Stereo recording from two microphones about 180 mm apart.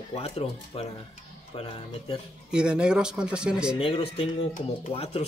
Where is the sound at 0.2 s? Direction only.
35° left (ahead or behind).